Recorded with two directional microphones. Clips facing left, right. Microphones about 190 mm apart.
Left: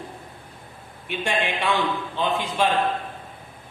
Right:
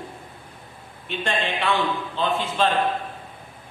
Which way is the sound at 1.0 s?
15° left (ahead or behind).